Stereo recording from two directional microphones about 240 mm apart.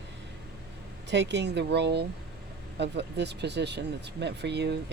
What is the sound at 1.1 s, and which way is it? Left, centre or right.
Speech, right.